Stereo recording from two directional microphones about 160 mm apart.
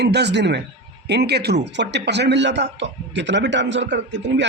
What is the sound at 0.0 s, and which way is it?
Speech, 90° right.